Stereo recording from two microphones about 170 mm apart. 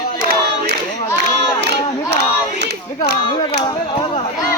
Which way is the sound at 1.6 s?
85° right.